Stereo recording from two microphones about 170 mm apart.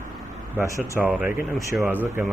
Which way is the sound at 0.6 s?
15° right (ahead or behind).